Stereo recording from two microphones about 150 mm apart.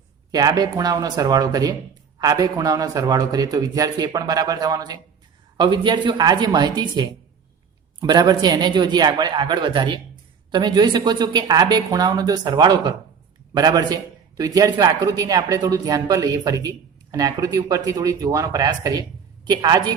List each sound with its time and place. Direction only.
0.3 s a man's voice: 25° right (ahead or behind)